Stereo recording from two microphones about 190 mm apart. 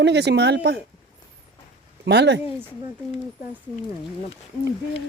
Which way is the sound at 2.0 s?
65° right (ahead or behind).